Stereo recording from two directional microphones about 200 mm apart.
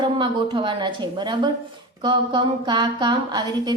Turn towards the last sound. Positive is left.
turn(degrees=-20)  # may be behind; listen again after turning